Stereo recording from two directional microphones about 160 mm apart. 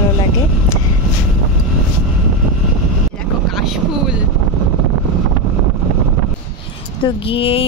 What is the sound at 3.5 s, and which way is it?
Speech, centre (ahead or behind).